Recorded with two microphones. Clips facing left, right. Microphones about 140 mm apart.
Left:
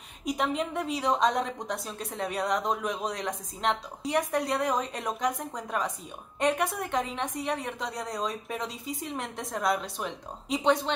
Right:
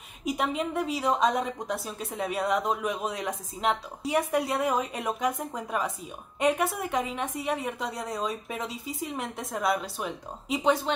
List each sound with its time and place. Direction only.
0.2 s a woman's voice: 5° right (ahead or behind)